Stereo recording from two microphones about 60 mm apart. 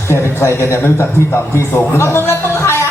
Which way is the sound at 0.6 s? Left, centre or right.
Left.